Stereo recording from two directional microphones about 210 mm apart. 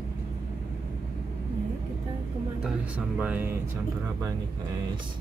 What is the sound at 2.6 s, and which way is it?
Speech, 5° right (ahead or behind).